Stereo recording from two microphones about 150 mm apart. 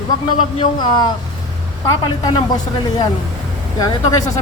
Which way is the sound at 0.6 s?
30° left (ahead or behind).